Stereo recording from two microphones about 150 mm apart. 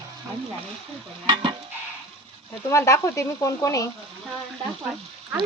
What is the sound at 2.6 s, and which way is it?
Speech, 20° left (ahead or behind).